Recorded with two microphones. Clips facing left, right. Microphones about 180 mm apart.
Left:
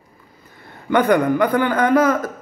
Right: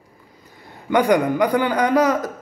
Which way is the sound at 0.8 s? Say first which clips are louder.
Left 1 dB; 15° right (ahead or behind).